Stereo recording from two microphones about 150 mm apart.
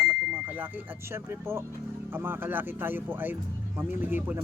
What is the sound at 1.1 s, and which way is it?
Speech, 15° right (ahead or behind).